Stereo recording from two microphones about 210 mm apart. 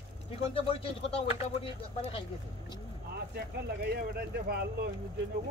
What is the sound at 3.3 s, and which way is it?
Speech, 50° right (ahead or behind).